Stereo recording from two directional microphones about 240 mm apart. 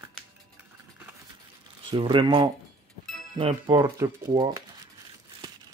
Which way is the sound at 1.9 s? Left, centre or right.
Right.